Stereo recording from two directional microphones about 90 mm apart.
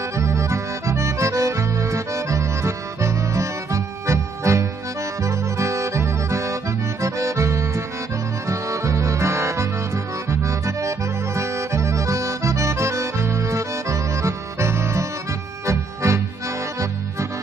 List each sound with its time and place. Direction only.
0.2 s accordion: 35° right (ahead or behind)
5.2 s music: 35° right (ahead or behind)
7.0 s accordion: 35° right (ahead or behind)
15.6 s music: 30° right (ahead or behind)